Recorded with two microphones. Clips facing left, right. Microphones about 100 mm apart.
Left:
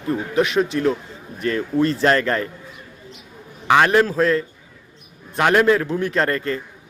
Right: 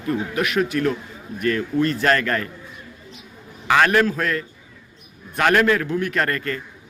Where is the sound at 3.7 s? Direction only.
20° left (ahead or behind).